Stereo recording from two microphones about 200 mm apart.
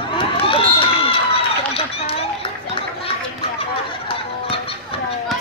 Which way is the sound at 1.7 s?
30° left (ahead or behind).